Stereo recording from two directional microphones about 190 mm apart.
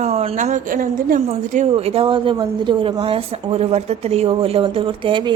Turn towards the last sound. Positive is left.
turn(degrees=-25)  # may be behind; listen again after turning